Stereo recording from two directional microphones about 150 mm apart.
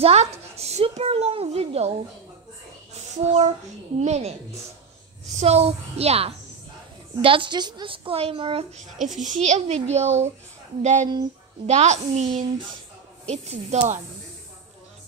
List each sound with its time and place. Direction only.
0.0 s a woman's voice: 45° right (ahead or behind)
2.9 s child singing: 45° right (ahead or behind)
4.0 s a woman's voice: 45° right (ahead or behind)
5.4 s a woman's voice: 45° right (ahead or behind)
9.0 s a woman's voice: 55° right (ahead or behind)